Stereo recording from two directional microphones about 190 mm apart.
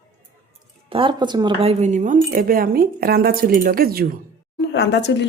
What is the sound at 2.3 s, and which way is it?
Speech, 50° right (ahead or behind).